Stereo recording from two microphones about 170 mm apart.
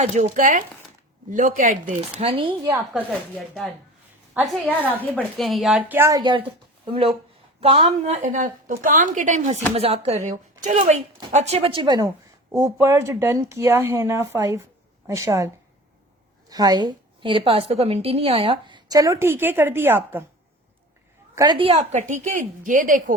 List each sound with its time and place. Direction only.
0.0 s a woman's voice: 40° right (ahead or behind)
2.1 s speech: 30° right (ahead or behind)
3.3 s a woman's voice: 5° left (ahead or behind); by 15.4 s 20° right (ahead or behind)
16.5 s a woman's voice: 20° right (ahead or behind)
21.6 s a woman's voice: 40° right (ahead or behind)